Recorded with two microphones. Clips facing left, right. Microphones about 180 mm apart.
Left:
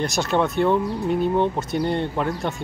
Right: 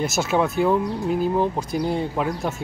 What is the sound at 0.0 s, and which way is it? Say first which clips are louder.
Speech: even; 5° right (ahead or behind).